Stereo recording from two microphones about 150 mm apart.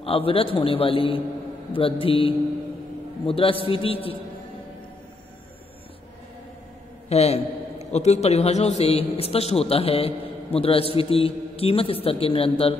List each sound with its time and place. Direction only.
0.0 s a man's voice: 40° left (ahead or behind)
7.1 s a man's voice: 45° left (ahead or behind)